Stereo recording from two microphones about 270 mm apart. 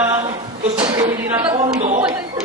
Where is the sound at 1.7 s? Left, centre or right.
Right.